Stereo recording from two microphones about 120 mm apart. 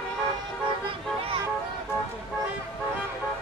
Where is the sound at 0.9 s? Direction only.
45° right (ahead or behind).